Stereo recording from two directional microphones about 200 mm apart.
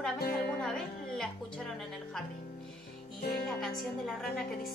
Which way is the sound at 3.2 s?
50° left (ahead or behind).